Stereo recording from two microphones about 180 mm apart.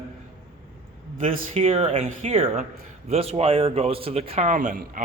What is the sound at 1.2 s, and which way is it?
Speech, 35° right (ahead or behind).